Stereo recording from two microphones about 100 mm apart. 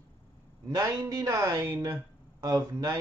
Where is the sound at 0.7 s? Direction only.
35° right (ahead or behind).